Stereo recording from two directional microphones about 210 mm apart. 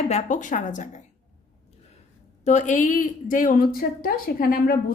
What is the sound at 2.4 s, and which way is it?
A woman's voice, 35° left (ahead or behind).